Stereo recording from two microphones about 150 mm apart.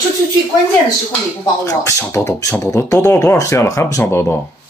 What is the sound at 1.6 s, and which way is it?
Speech, 20° left (ahead or behind).